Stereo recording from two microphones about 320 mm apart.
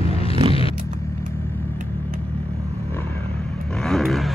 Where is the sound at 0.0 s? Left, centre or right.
Centre.